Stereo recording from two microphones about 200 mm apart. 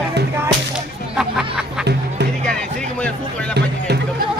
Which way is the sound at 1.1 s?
5° right (ahead or behind).